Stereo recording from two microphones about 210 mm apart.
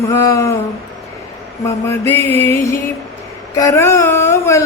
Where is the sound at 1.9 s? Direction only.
10° left (ahead or behind).